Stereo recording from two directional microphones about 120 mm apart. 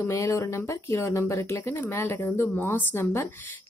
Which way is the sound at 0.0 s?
25° left (ahead or behind).